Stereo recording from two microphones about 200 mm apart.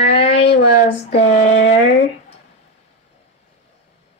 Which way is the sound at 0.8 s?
35° left (ahead or behind).